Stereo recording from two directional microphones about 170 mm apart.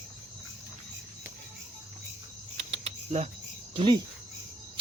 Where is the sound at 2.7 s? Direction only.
40° right (ahead or behind).